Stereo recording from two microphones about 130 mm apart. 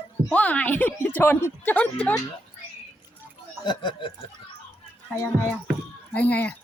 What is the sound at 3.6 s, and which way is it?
Snicker, 35° left (ahead or behind).